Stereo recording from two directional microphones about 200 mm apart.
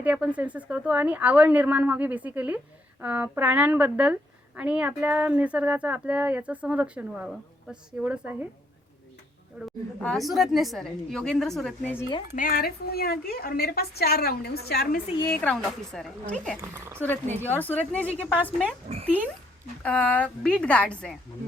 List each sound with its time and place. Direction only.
0.0 s a woman's voice: 5° right (ahead or behind)
9.6 s a woman's voice: centre (ahead or behind)
12.3 s a woman's voice: 45° left (ahead or behind)
15.2 s a woman's voice: 10° left (ahead or behind)
16.6 s a woman's voice: 15° right (ahead or behind)
17.5 s a woman's voice: 10° left (ahead or behind)
19.0 s a woman's voice: 10° right (ahead or behind)
19.8 s a woman's voice: 5° left (ahead or behind)